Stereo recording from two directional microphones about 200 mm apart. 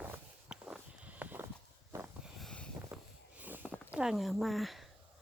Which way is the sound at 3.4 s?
10° right (ahead or behind).